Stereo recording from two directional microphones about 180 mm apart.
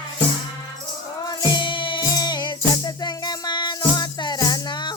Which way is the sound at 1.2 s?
25° left (ahead or behind).